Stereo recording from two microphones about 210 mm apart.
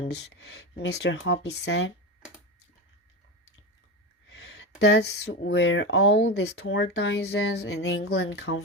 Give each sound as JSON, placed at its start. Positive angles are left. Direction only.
{"t": 0.1, "sound": "speech", "side_deg": 55}
{"t": 4.3, "sound": "a sound", "side_deg": 55}
{"t": 4.8, "sound": "speech", "side_deg": 55}